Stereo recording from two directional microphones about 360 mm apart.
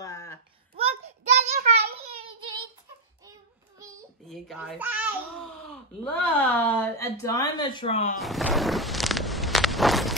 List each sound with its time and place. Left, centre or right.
0.0 s babbling: centre
0.7 s a sound: centre
4.3 s a child's voice: centre
8.2 s walk: centre